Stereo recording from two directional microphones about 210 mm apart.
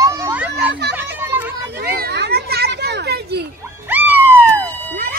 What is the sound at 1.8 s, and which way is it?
Children playing, 50° right (ahead or behind).